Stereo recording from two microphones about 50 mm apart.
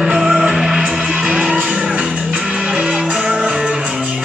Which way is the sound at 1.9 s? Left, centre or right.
Right.